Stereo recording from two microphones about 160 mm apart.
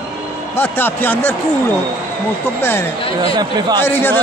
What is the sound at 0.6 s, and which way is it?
Speech, 15° left (ahead or behind).